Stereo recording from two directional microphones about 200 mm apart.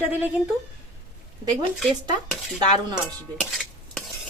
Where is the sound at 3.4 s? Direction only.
Centre (ahead or behind).